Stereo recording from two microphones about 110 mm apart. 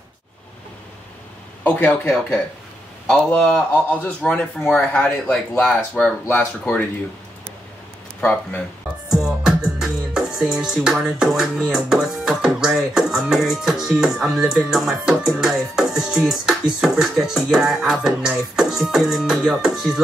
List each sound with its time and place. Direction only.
1.6 s a man's voice: 15° left (ahead or behind)
3.1 s a man's voice: 5° left (ahead or behind)
8.2 s a man's voice: 15° left (ahead or behind)
9.1 s music: 5° right (ahead or behind)
10.6 s speech: 5° right (ahead or behind)